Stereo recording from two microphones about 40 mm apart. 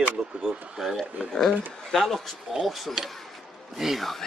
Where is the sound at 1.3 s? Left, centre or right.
Centre.